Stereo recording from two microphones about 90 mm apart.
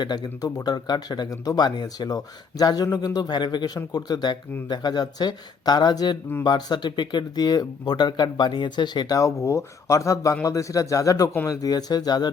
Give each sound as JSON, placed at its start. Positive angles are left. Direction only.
{"t": 0.0, "sound": "speech", "side_deg": 50}
{"t": 9.1, "sound": "speech", "side_deg": 35}